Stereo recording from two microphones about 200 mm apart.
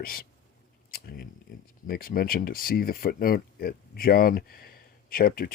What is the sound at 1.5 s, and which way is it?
Speech, 45° left (ahead or behind).